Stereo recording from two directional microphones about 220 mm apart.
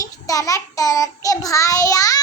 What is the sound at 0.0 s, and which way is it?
Child singing, 15° left (ahead or behind).